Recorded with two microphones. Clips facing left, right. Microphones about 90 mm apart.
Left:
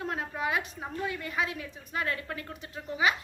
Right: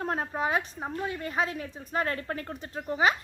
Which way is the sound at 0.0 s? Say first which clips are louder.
Right 3 dB; 40° right (ahead or behind).